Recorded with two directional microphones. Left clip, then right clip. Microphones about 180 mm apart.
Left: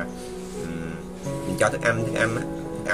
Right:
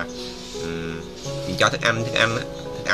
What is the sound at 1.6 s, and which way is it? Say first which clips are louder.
Speech: right 2 dB; 10° left (ahead or behind).